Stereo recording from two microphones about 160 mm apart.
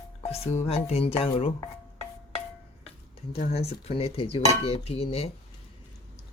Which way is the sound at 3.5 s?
40° left (ahead or behind).